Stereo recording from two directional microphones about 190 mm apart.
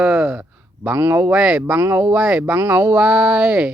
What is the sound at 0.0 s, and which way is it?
Speech, 5° right (ahead or behind).